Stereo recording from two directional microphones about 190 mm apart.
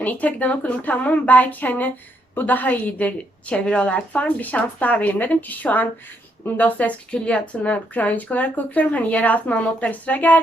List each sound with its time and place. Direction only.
0.0 s a woman's voice: 10° left (ahead or behind)